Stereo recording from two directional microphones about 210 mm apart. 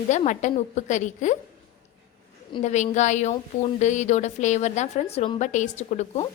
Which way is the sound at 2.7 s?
35° left (ahead or behind).